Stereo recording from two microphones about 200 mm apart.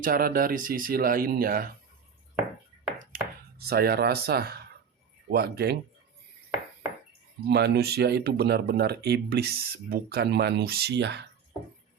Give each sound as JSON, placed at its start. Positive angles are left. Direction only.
{"t": 0.0, "sound": "speech", "side_deg": -45}
{"t": 3.6, "sound": "speech", "side_deg": -50}
{"t": 7.4, "sound": "speech", "side_deg": -55}